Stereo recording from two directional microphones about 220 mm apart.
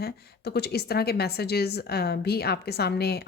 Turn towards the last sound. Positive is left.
turn(degrees=45)  # may be behind; listen again after turning